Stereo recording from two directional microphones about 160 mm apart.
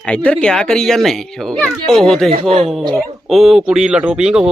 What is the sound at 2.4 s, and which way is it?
Speech, 40° right (ahead or behind).